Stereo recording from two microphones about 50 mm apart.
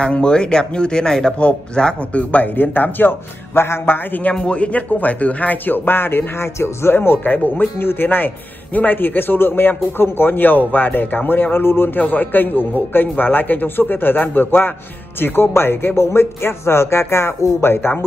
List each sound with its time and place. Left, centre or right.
0.0 s speech: centre
2.1 s a man's voice: left
4.3 s a man's voice: left